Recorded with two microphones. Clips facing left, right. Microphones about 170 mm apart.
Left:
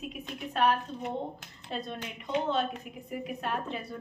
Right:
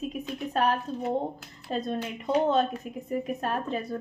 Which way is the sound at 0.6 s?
40° right (ahead or behind).